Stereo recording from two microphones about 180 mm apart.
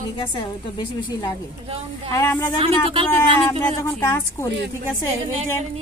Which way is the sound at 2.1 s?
10° left (ahead or behind).